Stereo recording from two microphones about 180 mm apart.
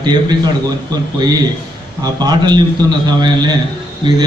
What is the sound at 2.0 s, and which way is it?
A man's voice, 20° right (ahead or behind).